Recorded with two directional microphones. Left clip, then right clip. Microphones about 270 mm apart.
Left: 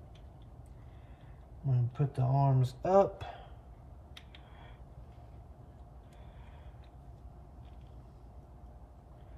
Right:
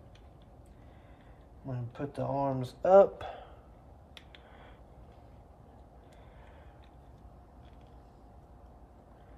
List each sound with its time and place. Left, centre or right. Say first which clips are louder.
1.7 s speech: left 1 dB; right